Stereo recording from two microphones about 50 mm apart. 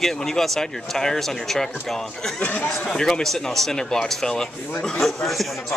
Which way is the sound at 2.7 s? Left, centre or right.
Centre.